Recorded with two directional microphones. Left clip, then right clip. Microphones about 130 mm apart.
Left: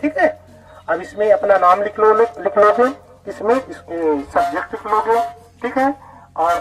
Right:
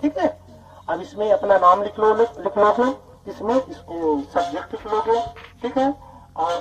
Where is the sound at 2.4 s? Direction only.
25° right (ahead or behind).